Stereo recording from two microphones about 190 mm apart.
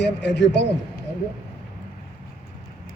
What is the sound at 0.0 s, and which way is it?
Speech, 65° left (ahead or behind).